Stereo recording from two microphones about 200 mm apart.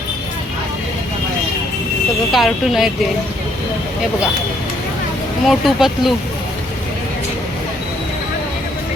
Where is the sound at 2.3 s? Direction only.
Centre (ahead or behind).